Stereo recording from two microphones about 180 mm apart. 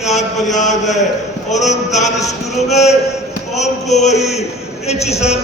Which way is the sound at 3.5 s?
40° left (ahead or behind).